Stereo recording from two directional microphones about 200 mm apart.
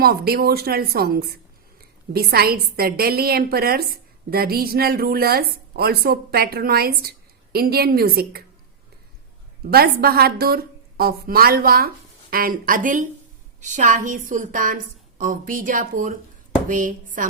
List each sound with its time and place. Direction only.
0.0 s a woman's voice: 50° right (ahead or behind)
9.6 s a woman's voice: 50° right (ahead or behind)